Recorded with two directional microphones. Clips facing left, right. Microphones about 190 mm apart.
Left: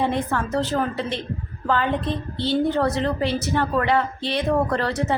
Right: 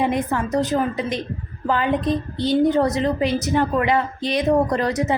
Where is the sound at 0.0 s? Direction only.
15° right (ahead or behind).